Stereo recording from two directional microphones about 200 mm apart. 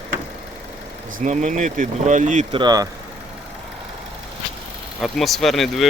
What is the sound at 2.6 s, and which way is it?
Speech, 20° right (ahead or behind).